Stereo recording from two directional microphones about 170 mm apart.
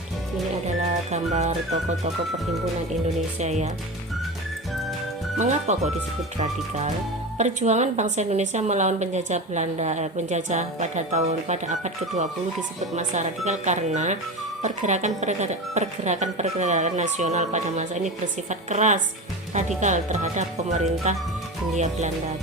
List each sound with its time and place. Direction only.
1.1 s a woman's voice: 40° right (ahead or behind)
3.4 s a woman's voice: 40° right (ahead or behind)
5.4 s a woman's voice: 45° right (ahead or behind)